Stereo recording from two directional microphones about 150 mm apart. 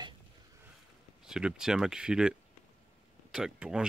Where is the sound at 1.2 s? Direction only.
5° right (ahead or behind).